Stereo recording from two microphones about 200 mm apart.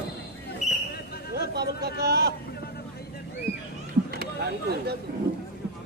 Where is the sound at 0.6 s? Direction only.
35° left (ahead or behind).